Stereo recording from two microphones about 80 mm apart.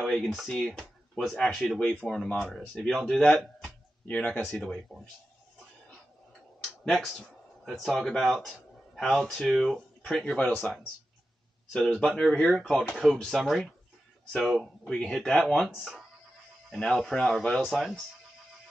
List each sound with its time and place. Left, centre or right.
0.0 s a sound: centre
0.3 s speech: centre
6.6 s speech: centre
11.7 s speech: centre